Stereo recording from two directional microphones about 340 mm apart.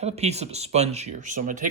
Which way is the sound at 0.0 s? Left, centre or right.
Centre.